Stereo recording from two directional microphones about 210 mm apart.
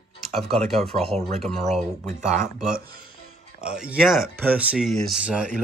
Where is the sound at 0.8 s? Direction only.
30° right (ahead or behind).